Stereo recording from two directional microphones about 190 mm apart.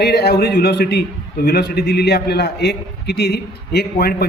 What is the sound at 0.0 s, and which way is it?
A man's voice, 60° left (ahead or behind).